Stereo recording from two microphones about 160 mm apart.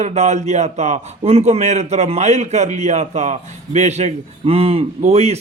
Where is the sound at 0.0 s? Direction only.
45° right (ahead or behind).